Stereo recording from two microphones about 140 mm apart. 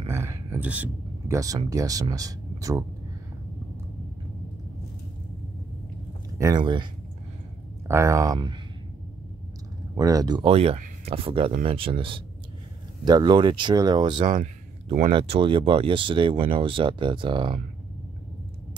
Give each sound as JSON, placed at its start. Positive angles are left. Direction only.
{"t": 0.1, "sound": "a sound", "side_deg": -20}
{"t": 1.3, "sound": "speech", "side_deg": -25}
{"t": 6.3, "sound": "speech", "side_deg": -20}
{"t": 6.6, "sound": "speech", "side_deg": -35}
{"t": 7.9, "sound": "speech", "side_deg": -20}
{"t": 9.9, "sound": "speech", "side_deg": -25}
{"t": 10.5, "sound": "speech", "side_deg": -45}
{"t": 14.9, "sound": "speech", "side_deg": -45}